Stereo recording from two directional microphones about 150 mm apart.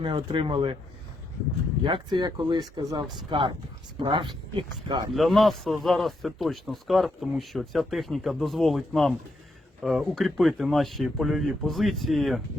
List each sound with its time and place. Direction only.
0.0 s speech: 30° right (ahead or behind)
1.8 s speech: 30° right (ahead or behind)
5.1 s speech: centre (ahead or behind)